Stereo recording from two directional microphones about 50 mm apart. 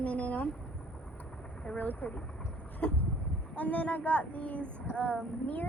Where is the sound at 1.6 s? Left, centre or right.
Left.